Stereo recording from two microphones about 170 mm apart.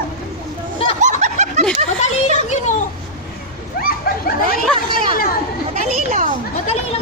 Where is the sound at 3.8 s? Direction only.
60° left (ahead or behind).